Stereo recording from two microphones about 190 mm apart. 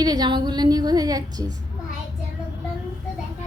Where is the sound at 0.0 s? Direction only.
20° right (ahead or behind).